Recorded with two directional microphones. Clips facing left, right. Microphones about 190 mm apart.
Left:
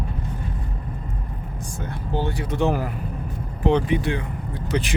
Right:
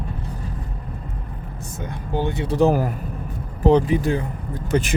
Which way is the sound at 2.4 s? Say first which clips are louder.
Right 7 dB; 35° right (ahead or behind).